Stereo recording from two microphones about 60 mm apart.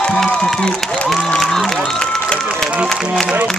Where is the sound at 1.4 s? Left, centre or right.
Centre.